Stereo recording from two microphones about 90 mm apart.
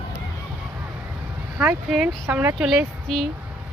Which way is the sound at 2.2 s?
25° right (ahead or behind).